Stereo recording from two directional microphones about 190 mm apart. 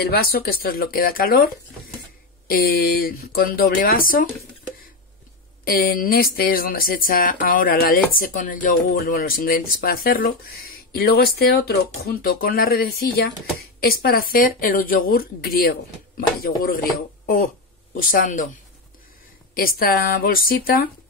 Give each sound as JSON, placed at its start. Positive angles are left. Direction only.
{"t": 0.0, "sound": "speech", "side_deg": 55}
{"t": 2.4, "sound": "speech", "side_deg": 50}
{"t": 5.7, "sound": "speech", "side_deg": 50}
{"t": 17.9, "sound": "speech", "side_deg": 50}
{"t": 19.5, "sound": "speech", "side_deg": 50}